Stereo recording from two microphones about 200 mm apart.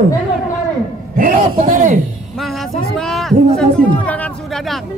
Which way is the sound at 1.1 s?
45° right (ahead or behind).